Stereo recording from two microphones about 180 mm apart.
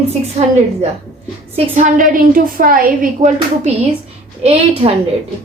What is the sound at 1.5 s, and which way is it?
A woman's voice, 45° right (ahead or behind).